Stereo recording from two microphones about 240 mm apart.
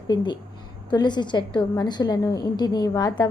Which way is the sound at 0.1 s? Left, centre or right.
Centre.